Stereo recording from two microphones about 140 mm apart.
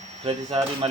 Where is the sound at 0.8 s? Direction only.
45° right (ahead or behind).